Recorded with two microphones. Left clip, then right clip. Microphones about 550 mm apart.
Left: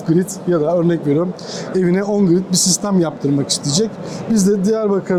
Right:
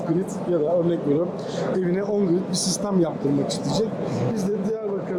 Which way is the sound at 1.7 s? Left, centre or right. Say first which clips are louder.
Left 8 dB; left.